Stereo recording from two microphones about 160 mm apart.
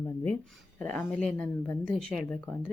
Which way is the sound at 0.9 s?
5° left (ahead or behind).